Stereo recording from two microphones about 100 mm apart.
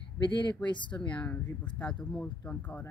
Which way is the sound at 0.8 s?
10° left (ahead or behind).